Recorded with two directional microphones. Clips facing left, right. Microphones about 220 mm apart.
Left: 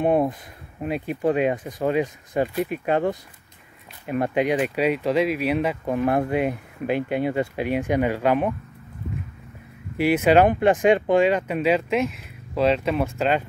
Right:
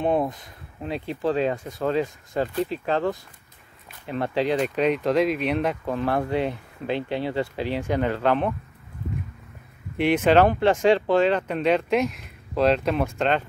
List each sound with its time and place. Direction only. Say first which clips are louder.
0.0 s speech: left 3 dB; 10° left (ahead or behind)
5.9 s speech: left 3 dB; 15° left (ahead or behind)
9.9 s speech: left 1 dB; 5° left (ahead or behind)